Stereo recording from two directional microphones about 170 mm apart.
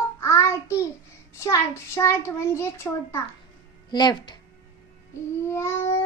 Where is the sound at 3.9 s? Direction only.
25° left (ahead or behind).